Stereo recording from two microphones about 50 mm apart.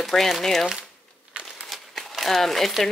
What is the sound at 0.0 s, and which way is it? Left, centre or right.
Speech, centre.